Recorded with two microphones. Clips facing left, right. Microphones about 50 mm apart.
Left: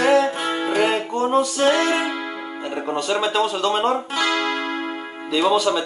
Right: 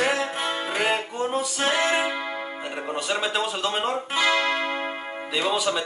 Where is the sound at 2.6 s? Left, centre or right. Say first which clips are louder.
Left 6 dB; centre.